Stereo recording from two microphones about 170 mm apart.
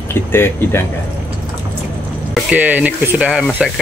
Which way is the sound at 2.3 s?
10° right (ahead or behind).